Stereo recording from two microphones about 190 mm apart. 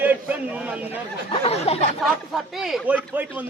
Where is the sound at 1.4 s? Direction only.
35° left (ahead or behind).